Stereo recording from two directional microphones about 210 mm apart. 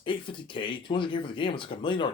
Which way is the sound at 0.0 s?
25° left (ahead or behind).